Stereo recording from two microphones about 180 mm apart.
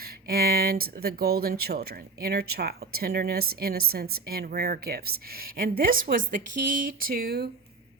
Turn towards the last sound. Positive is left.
turn(degrees=-60)  # may be behind; listen again after turning